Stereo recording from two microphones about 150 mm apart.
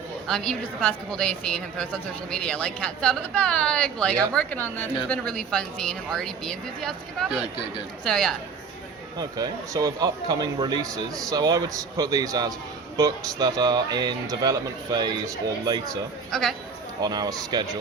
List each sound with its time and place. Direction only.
0.3 s a woman's voice: 5° left (ahead or behind)
9.1 s speech: 25° right (ahead or behind)
16.3 s a woman's voice: centre (ahead or behind)
17.0 s speech: 25° right (ahead or behind)